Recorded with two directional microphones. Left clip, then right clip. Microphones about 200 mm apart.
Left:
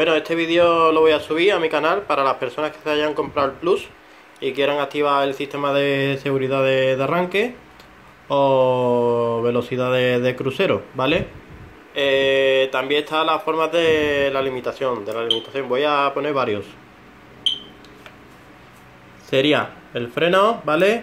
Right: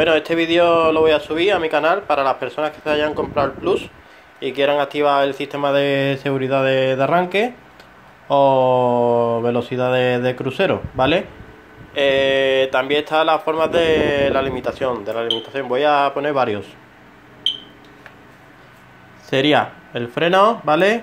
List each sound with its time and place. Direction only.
0.0 s a man's voice: 30° right (ahead or behind)
19.3 s speech: 30° right (ahead or behind)